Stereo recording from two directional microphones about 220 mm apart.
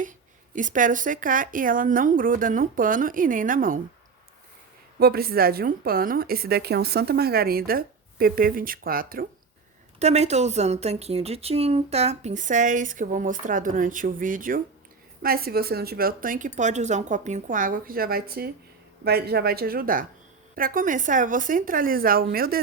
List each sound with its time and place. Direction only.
0.5 s a woman's voice: 35° right (ahead or behind)
4.9 s a woman's voice: 45° right (ahead or behind)
10.0 s a woman's voice: 30° right (ahead or behind)